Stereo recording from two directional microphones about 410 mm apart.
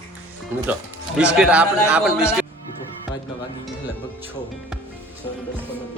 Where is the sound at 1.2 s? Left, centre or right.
Centre.